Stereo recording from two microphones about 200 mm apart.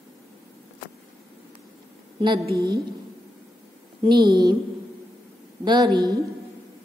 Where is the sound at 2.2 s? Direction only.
25° right (ahead or behind).